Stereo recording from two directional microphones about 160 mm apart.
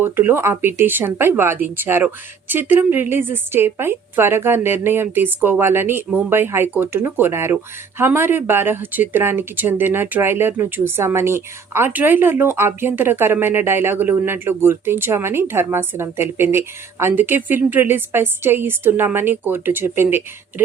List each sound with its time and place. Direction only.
0.0 s a woman's voice: 15° right (ahead or behind)